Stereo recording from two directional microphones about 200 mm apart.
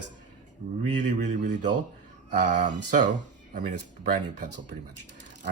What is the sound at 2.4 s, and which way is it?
Speech, 40° right (ahead or behind).